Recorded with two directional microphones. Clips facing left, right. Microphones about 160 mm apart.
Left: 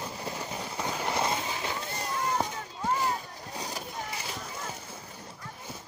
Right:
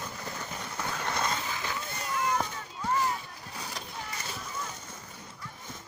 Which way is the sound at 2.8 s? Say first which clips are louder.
Even; 35° left (ahead or behind).